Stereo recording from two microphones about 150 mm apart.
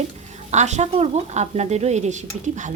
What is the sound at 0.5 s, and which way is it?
A woman's voice, 50° right (ahead or behind).